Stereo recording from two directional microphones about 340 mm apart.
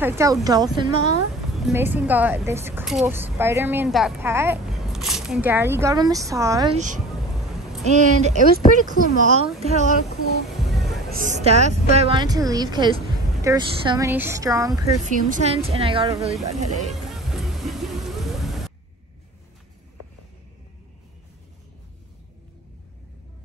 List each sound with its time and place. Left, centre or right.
0.0 s a woman's voice: centre
7.8 s speech: centre
11.1 s a woman's voice: right
15.0 s a woman's voice: right
16.9 s music: centre